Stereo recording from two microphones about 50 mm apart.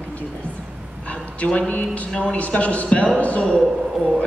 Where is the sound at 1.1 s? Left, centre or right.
Left.